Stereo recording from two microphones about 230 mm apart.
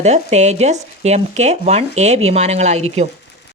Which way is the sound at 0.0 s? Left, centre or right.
Right.